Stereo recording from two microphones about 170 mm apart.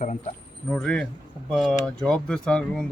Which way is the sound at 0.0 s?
50° left (ahead or behind).